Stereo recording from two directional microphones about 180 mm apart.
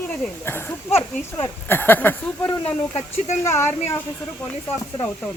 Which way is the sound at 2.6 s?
35° left (ahead or behind).